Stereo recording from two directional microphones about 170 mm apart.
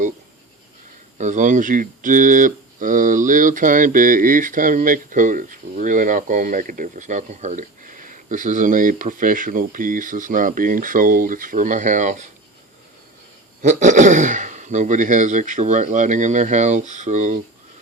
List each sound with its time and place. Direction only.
1.2 s speech: 45° right (ahead or behind)
13.6 s speech: 45° right (ahead or behind)